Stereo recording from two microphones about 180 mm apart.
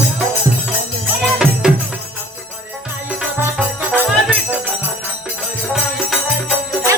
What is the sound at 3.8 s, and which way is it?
Music, 5° right (ahead or behind).